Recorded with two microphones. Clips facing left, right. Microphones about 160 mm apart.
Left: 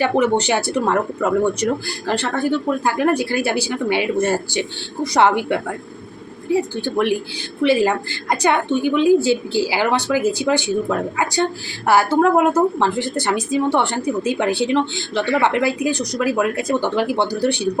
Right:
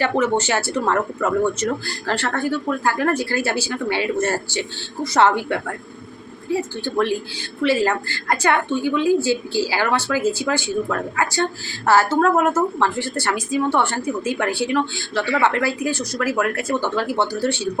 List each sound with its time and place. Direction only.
0.0 s a woman's voice: 15° left (ahead or behind)